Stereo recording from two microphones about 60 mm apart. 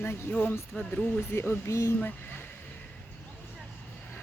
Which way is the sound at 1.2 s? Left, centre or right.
Left.